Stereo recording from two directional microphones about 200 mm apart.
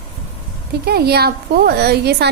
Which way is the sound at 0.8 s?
50° right (ahead or behind).